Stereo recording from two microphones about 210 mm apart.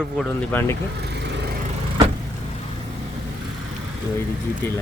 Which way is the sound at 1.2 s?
55° right (ahead or behind).